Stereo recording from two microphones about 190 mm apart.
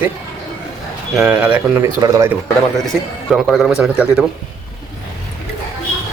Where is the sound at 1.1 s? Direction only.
5° right (ahead or behind).